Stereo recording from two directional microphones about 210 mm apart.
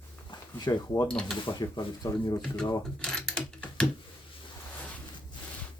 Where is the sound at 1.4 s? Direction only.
20° left (ahead or behind).